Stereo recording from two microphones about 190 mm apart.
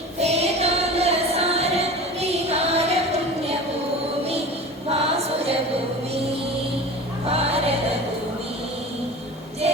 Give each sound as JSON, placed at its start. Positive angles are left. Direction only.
{"t": 0.2, "sound": "music", "side_deg": -35}
{"t": 4.9, "sound": "choir", "side_deg": -30}
{"t": 7.3, "sound": "a sound", "side_deg": -30}